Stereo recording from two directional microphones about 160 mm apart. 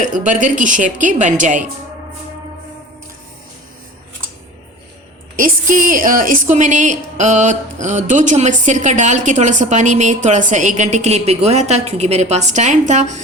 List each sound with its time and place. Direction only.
0.0 s a woman's voice: 50° right (ahead or behind)
5.4 s a woman's voice: 55° right (ahead or behind)